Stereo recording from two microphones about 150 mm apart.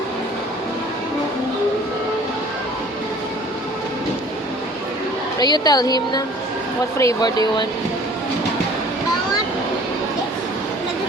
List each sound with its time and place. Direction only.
5.4 s a woman's voice: 30° left (ahead or behind)